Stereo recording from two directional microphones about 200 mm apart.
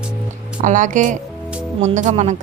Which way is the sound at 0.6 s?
40° right (ahead or behind).